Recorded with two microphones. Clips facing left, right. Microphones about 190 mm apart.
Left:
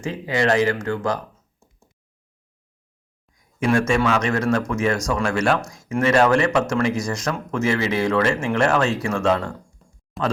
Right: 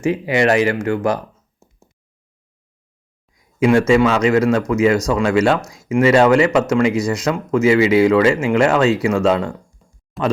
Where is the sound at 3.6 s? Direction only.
20° right (ahead or behind).